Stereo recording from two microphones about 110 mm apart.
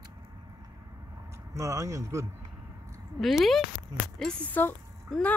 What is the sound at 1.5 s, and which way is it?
Speech, 30° right (ahead or behind).